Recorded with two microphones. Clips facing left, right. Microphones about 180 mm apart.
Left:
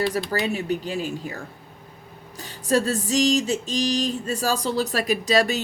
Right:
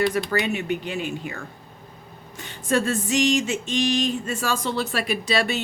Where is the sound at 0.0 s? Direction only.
35° left (ahead or behind).